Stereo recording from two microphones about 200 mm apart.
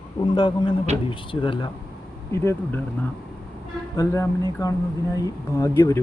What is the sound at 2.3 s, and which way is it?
Speech, 15° left (ahead or behind).